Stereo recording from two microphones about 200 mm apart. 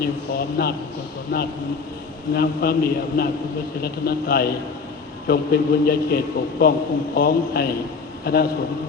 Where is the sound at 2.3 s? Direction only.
50° left (ahead or behind).